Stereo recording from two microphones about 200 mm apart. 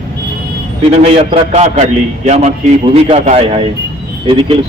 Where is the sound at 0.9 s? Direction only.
30° right (ahead or behind).